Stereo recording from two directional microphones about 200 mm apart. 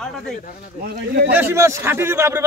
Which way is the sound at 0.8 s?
50° right (ahead or behind).